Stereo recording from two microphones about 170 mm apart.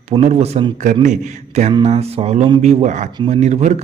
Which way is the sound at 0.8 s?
45° right (ahead or behind).